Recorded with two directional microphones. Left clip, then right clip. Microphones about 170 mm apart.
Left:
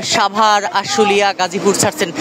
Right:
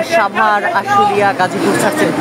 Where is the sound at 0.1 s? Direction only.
25° left (ahead or behind).